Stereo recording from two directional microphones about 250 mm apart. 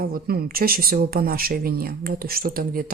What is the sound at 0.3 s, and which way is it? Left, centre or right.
Speech, right.